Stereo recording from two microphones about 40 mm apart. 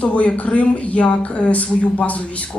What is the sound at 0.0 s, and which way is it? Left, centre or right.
Speech, left.